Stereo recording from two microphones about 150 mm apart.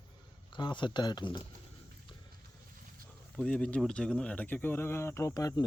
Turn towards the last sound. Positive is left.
turn(degrees=25)  # may be behind; listen again after turning